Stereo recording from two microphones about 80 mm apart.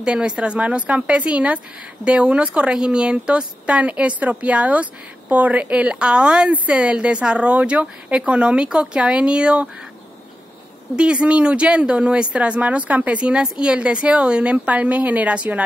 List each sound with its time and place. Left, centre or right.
0.0 s speech: centre
11.0 s speech: centre